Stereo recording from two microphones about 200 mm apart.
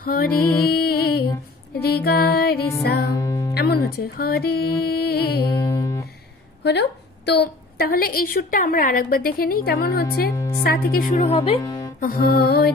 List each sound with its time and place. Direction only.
0.0 s music: 50° left (ahead or behind)
3.2 s music: 15° left (ahead or behind)
3.5 s music: 55° left (ahead or behind)
5.5 s music: 15° left (ahead or behind)
6.6 s a woman's voice: 60° left (ahead or behind)
10.3 s a woman's voice: 15° left (ahead or behind)
10.6 s music: 50° left (ahead or behind)
11.2 s speech: 30° left (ahead or behind)
12.0 s music: 45° left (ahead or behind)